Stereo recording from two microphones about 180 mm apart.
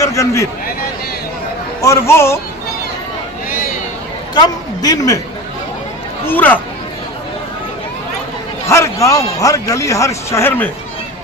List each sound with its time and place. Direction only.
0.0 s a man's voice: 15° left (ahead or behind)
1.8 s a man's voice: 15° left (ahead or behind)
4.4 s a woman's voice: 20° left (ahead or behind)
6.2 s a man's voice: 10° left (ahead or behind)
8.6 s a man's voice: 15° left (ahead or behind)